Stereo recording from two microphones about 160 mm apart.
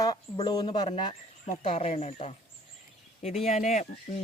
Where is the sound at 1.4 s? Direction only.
45° left (ahead or behind).